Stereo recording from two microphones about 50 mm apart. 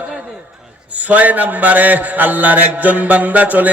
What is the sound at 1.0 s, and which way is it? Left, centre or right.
Mantra, right.